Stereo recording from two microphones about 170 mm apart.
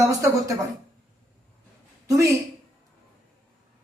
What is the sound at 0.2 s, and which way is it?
Speech, 20° right (ahead or behind).